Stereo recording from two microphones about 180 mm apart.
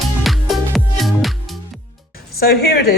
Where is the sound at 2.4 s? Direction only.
60° left (ahead or behind).